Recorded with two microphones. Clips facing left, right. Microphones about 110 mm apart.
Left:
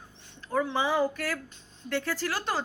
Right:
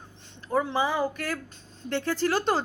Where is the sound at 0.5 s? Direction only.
20° right (ahead or behind).